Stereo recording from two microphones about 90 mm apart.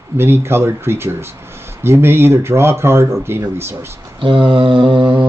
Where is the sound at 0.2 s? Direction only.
25° right (ahead or behind).